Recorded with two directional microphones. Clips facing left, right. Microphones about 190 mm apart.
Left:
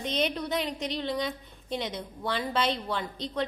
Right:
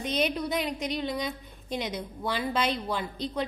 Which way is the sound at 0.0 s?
10° right (ahead or behind).